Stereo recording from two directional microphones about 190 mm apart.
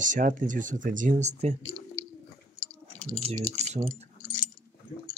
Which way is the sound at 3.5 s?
35° right (ahead or behind).